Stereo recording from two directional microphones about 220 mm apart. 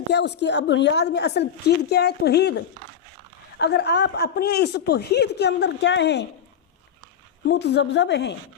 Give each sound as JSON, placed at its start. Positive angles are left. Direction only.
{"t": 0.1, "sound": "a woman's voice", "side_deg": 50}
{"t": 7.4, "sound": "a woman's voice", "side_deg": 50}